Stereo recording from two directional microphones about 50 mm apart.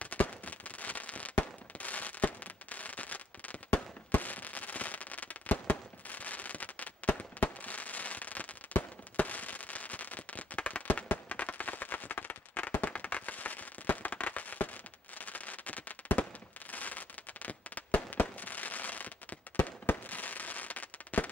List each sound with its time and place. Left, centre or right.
0.0 s fireworks: left
11.1 s firecracker: left
16.7 s fireworks: left